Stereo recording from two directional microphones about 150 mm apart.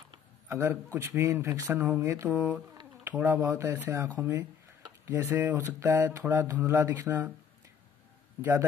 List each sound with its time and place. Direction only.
0.5 s a man's voice: 20° right (ahead or behind)
2.0 s a sound: 20° right (ahead or behind)
3.0 s speech: 15° right (ahead or behind)
8.4 s speech: 15° right (ahead or behind)